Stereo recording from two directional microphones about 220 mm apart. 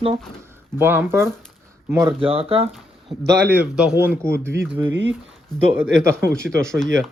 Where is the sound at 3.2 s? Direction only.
50° right (ahead or behind).